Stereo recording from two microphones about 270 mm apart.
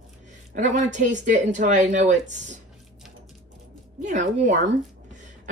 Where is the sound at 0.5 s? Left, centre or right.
Right.